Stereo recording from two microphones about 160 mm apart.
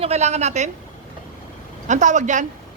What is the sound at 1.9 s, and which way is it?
Speech, 50° right (ahead or behind).